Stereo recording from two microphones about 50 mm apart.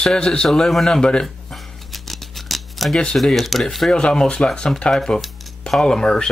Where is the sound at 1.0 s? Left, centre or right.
Centre.